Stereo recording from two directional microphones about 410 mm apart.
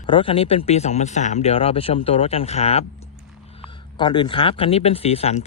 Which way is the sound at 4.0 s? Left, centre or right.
Centre.